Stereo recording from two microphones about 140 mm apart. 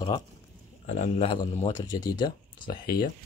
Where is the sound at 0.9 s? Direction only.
50° left (ahead or behind).